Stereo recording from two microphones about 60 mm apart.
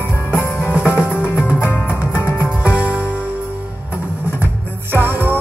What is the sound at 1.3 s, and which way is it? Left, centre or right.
Music, left.